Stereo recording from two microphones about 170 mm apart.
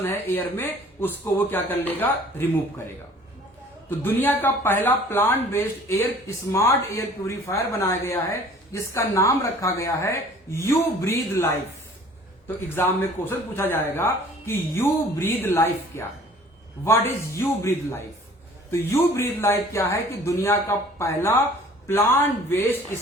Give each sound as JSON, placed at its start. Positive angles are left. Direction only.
{"t": 0.0, "sound": "speech", "side_deg": 15}
{"t": 3.8, "sound": "speech", "side_deg": 10}
{"t": 12.8, "sound": "speech", "side_deg": 15}